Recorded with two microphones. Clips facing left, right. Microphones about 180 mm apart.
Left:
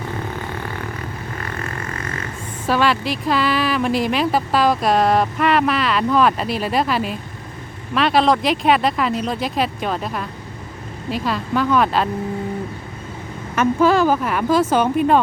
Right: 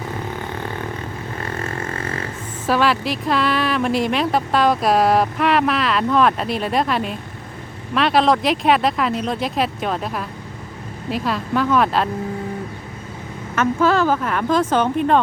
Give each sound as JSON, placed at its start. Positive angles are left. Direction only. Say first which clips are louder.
{"t": 1.4, "sound": "vehicle", "louder": "right 4 dB", "side_deg": -25}
{"t": 2.6, "sound": "speech", "louder": "even", "side_deg": 0}
{"t": 13.6, "sound": "speech", "louder": "left 2 dB", "side_deg": 15}